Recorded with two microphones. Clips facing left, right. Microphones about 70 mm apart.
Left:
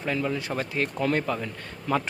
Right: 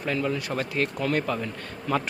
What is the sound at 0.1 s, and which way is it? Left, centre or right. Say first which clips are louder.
Speech: right 1 dB; centre.